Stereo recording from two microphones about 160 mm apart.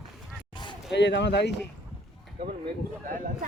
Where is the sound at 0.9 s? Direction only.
90° left.